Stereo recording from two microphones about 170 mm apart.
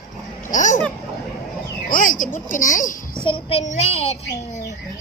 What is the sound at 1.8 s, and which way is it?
Speech, 55° left (ahead or behind).